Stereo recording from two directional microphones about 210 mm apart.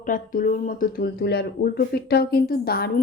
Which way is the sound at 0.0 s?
40° left (ahead or behind).